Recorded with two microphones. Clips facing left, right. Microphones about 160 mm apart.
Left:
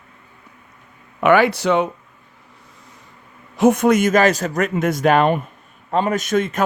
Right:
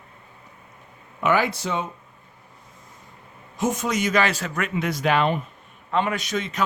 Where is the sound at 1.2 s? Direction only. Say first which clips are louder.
Left 7 dB; 65° left (ahead or behind).